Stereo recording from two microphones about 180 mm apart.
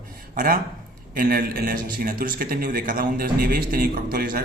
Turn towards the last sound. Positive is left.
turn(degrees=-55)  # may be behind; listen again after turning